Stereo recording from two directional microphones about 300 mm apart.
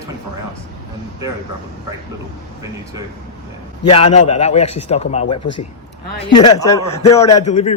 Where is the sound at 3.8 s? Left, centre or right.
Centre.